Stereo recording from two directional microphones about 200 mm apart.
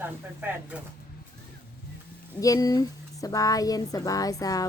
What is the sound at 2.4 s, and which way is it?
Speech, 20° left (ahead or behind).